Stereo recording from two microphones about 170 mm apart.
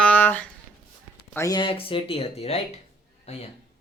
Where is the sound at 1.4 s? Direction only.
25° left (ahead or behind).